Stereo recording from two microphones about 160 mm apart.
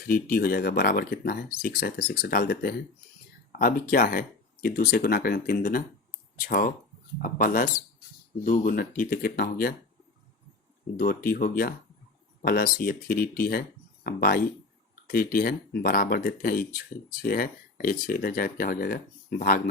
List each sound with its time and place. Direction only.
0.1 s speech: 65° left (ahead or behind)
10.9 s speech: 65° left (ahead or behind)